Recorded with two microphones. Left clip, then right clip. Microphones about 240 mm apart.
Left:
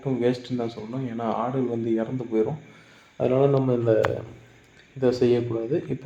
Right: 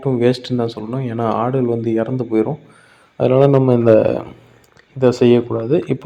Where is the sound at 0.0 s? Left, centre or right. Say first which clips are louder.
Right 8 dB; right.